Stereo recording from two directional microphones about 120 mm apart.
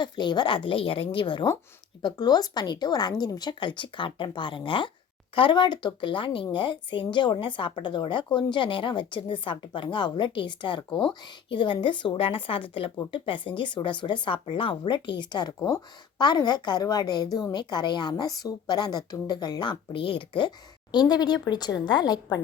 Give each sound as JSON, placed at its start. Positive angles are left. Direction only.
{"t": 0.0, "sound": "a woman's voice", "side_deg": 40}